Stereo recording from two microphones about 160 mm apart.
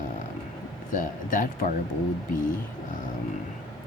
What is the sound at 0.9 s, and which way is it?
Speech, 55° left (ahead or behind).